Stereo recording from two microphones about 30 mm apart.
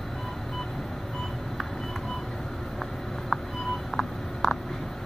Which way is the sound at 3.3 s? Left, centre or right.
Centre.